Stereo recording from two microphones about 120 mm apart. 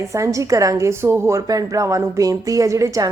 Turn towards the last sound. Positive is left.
turn(degrees=-25)  # may be behind; listen again after turning